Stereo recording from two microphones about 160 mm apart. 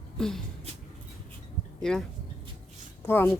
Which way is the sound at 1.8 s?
5° left (ahead or behind).